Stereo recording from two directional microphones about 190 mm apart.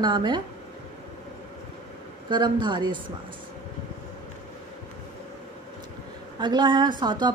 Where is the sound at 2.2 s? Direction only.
25° right (ahead or behind).